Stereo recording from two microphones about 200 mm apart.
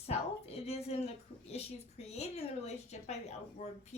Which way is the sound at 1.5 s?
30° left (ahead or behind).